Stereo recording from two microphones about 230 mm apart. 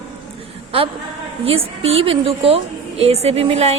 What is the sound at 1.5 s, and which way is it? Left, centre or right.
A woman's voice, right.